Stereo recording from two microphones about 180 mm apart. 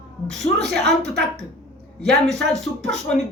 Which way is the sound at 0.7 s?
65° right (ahead or behind).